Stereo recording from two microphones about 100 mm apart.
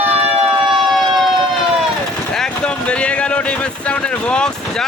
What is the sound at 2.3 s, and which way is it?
Speech, 5° left (ahead or behind).